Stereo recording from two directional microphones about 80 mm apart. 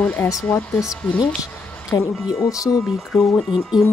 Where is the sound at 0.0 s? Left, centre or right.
Centre.